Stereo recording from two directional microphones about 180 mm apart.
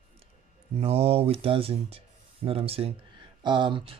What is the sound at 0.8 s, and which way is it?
Speech, 35° right (ahead or behind).